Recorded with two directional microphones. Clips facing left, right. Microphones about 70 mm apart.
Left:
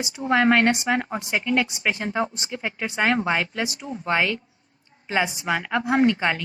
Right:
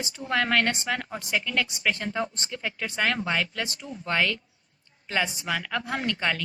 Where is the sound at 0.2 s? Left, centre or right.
Left.